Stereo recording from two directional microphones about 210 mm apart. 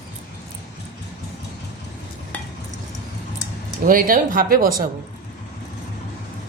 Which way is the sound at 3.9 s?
40° right (ahead or behind).